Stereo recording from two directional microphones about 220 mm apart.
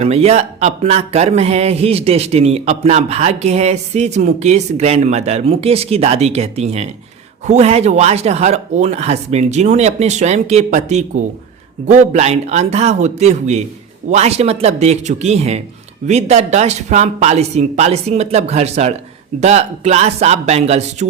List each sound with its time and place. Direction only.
0.0 s speech: 30° right (ahead or behind)